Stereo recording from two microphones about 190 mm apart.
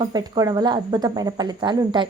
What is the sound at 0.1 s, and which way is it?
Speech, 20° right (ahead or behind).